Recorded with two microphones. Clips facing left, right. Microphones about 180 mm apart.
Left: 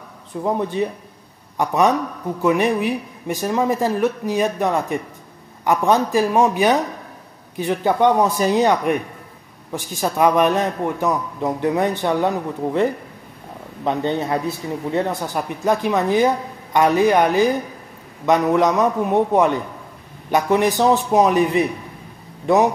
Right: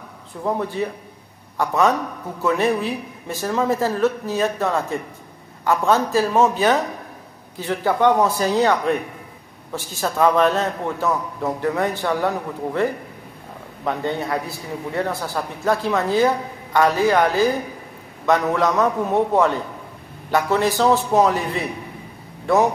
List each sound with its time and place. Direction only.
0.4 s a man's voice: 15° left (ahead or behind)